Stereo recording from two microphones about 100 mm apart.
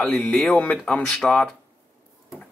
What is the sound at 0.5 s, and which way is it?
Speech, 15° left (ahead or behind).